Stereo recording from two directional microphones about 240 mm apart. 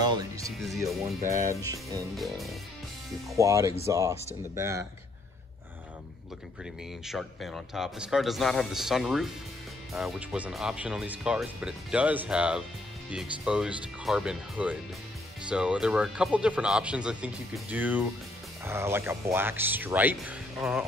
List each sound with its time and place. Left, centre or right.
0.1 s speech: centre
0.6 s speech: centre
1.2 s speech: centre
2.1 s speech: centre
3.3 s speech: centre
7.1 s speech: centre